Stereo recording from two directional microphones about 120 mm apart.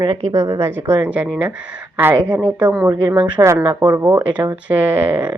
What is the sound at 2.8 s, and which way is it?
A woman's voice, 25° right (ahead or behind).